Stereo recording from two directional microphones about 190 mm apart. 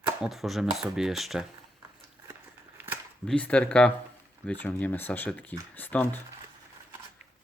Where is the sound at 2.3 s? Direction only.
10° right (ahead or behind).